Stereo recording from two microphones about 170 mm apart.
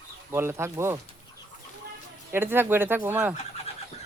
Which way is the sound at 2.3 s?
15° right (ahead or behind).